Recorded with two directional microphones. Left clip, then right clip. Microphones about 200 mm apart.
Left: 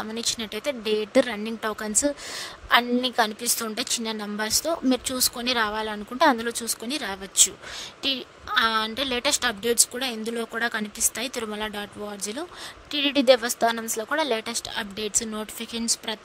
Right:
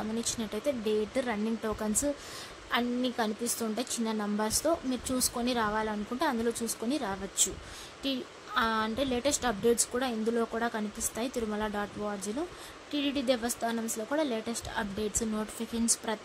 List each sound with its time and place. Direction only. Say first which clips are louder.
0.0 s a woman's voice: left 6 dB; 45° left (ahead or behind)
12.9 s a woman's voice: left 11 dB; 50° left (ahead or behind)